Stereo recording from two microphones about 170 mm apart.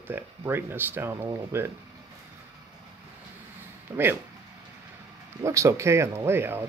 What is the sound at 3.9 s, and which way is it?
Speech, 15° right (ahead or behind).